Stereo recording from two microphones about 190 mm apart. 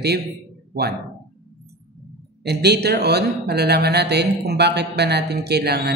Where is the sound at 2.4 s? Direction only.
60° right (ahead or behind).